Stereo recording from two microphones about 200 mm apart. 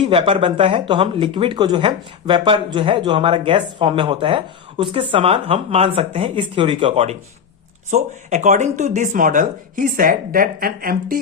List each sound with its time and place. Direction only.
0.0 s speech: 25° right (ahead or behind); by 11.2 s 50° right (ahead or behind)